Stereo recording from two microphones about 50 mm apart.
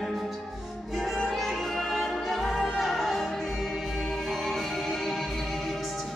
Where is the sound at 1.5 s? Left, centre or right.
Centre.